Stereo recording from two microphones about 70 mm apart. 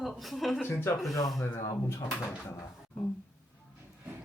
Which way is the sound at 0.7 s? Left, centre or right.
Left.